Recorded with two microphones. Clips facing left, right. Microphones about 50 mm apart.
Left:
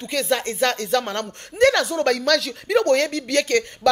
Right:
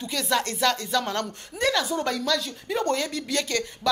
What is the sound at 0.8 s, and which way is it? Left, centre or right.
Speech, left.